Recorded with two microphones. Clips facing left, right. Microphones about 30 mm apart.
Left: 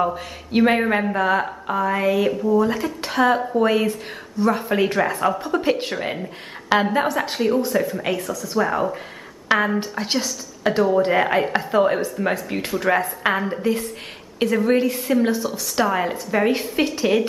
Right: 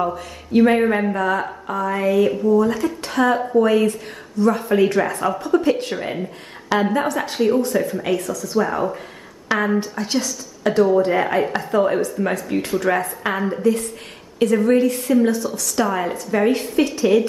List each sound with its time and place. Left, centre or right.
0.6 s a woman's voice: centre
7.3 s speech: centre
9.8 s a woman's voice: left